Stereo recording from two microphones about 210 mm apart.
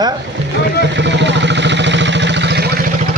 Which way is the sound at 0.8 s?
55° right (ahead or behind).